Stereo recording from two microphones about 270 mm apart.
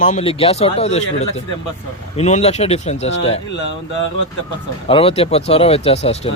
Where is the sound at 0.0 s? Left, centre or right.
Left.